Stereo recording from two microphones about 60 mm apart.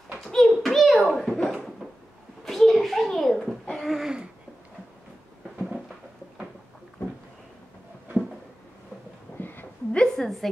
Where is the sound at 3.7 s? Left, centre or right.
Centre.